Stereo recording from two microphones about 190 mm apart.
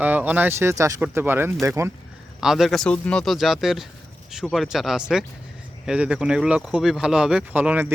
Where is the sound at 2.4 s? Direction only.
Centre (ahead or behind).